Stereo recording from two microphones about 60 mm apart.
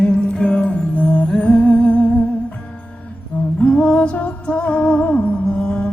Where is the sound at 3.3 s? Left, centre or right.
Centre.